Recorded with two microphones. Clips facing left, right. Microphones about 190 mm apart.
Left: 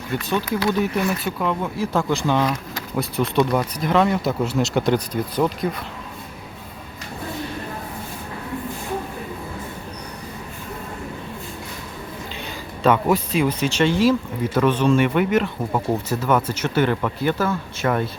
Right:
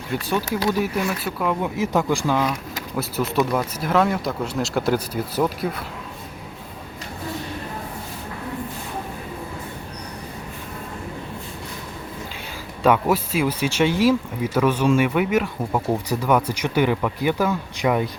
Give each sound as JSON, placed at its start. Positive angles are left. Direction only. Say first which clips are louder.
{"t": 0.7, "sound": "speech", "louder": "left 2 dB", "side_deg": -5}
{"t": 1.6, "sound": "speech", "louder": "right 1 dB", "side_deg": -20}
{"t": 12.8, "sound": "speech", "louder": "even", "side_deg": -10}